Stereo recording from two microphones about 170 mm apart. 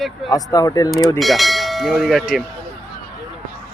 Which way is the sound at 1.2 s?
Centre (ahead or behind).